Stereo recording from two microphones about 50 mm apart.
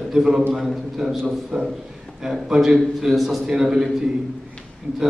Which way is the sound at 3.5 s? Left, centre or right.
Centre.